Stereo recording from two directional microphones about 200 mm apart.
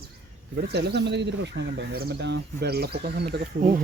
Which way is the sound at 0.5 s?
55° right (ahead or behind).